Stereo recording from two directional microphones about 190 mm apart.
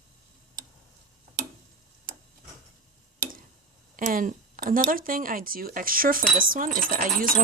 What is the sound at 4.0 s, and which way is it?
Speech, 45° right (ahead or behind).